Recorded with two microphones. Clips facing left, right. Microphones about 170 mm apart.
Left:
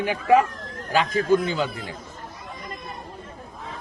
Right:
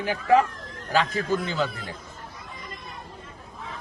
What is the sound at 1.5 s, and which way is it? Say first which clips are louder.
Speech: left 2 dB; 15° left (ahead or behind).